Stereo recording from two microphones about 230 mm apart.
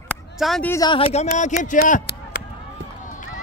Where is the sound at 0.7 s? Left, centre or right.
Centre.